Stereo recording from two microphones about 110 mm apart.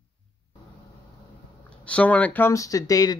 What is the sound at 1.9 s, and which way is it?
Speech, 10° left (ahead or behind).